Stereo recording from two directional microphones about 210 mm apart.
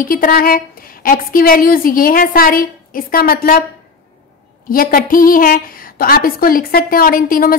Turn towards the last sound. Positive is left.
turn(degrees=40)  # may be behind; listen again after turning